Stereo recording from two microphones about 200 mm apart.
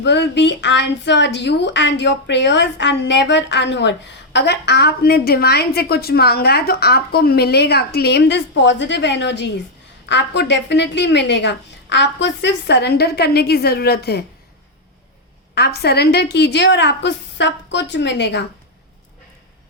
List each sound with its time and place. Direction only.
0.0 s speech: 60° left (ahead or behind)
15.5 s speech: 55° left (ahead or behind)